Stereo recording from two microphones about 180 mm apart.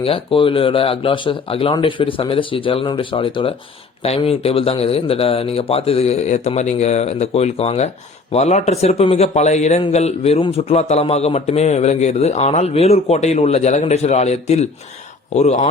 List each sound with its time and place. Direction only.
0.0 s a man's voice: 30° left (ahead or behind)